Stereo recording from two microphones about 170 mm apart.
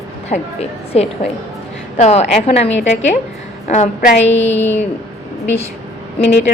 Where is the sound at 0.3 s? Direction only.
40° left (ahead or behind).